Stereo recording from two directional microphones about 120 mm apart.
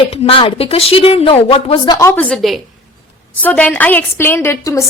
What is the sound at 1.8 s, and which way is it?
Speech, 40° left (ahead or behind).